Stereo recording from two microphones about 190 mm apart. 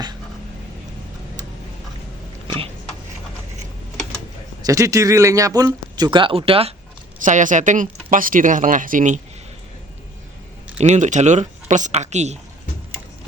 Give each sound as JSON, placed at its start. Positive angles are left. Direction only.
{"t": 4.6, "sound": "speech", "side_deg": -15}
{"t": 7.2, "sound": "speech", "side_deg": -40}
{"t": 10.8, "sound": "speech", "side_deg": -40}